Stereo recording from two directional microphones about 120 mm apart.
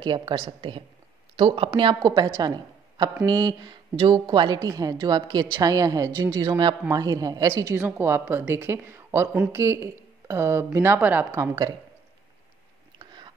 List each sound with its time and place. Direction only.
0.0 s a woman's voice: 40° right (ahead or behind)
2.0 s a woman's voice: 30° right (ahead or behind)
7.7 s speech: 20° right (ahead or behind)
13.0 s chewing: 40° right (ahead or behind)